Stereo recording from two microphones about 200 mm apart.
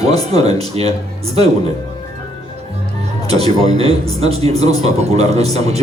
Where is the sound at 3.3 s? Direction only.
30° right (ahead or behind).